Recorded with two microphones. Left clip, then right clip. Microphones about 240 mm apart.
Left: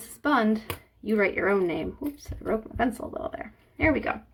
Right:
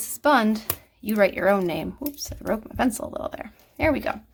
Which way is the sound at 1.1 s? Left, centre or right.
Right.